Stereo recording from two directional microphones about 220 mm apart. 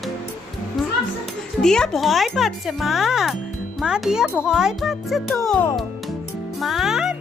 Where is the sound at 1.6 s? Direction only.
Centre (ahead or behind).